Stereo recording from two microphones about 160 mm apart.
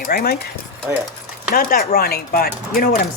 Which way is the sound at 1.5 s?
65° left (ahead or behind).